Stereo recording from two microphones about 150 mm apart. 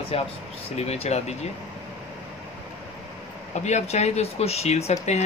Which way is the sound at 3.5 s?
50° left (ahead or behind).